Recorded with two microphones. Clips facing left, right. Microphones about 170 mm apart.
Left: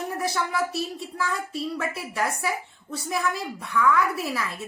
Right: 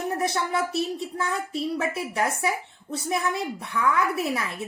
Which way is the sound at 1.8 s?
20° right (ahead or behind).